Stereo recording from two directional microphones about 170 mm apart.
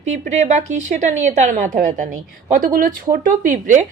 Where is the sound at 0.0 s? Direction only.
45° right (ahead or behind).